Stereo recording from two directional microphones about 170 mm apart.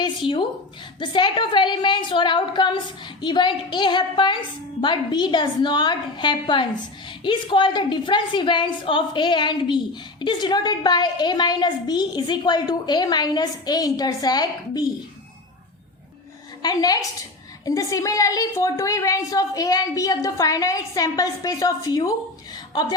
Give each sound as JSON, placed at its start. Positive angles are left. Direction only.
{"t": 0.0, "sound": "a woman's voice", "side_deg": 30}
{"t": 16.6, "sound": "a woman's voice", "side_deg": 20}
{"t": 22.5, "sound": "a sound", "side_deg": 25}